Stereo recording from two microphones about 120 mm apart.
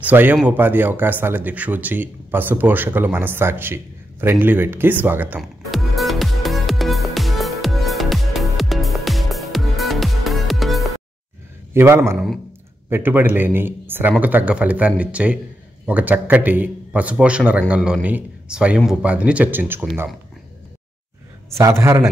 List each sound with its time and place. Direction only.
0.0 s speech: 15° right (ahead or behind)
5.4 s music: centre (ahead or behind)
11.7 s a man's voice: 20° right (ahead or behind)
21.5 s a man's voice: 25° right (ahead or behind)